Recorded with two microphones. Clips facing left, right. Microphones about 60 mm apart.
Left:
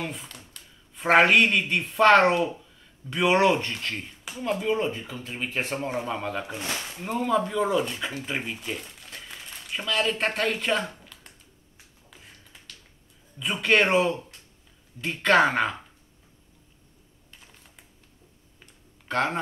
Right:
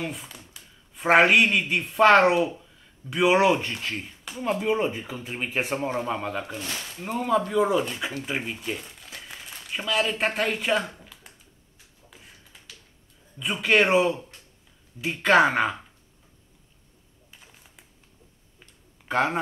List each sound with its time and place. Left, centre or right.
0.0 s speech: centre
5.9 s speech: centre
6.6 s speech: left
7.0 s speech: centre
12.1 s tap: centre
13.4 s speech: centre
17.3 s a sound: centre
18.6 s typing: centre